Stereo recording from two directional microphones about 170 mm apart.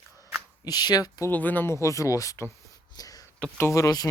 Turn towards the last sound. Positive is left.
turn(degrees=20)  # may be behind; listen again after turning